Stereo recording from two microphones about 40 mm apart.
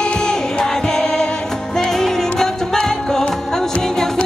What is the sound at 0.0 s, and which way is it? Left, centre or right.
Music, centre.